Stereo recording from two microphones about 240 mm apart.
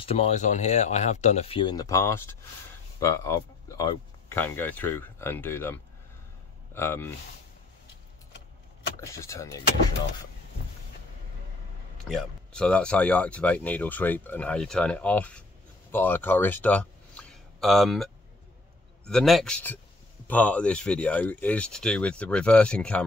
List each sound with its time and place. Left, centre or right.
0.0 s speech: left; by 7.1 s centre
9.0 s speech: centre
12.0 s speech: centre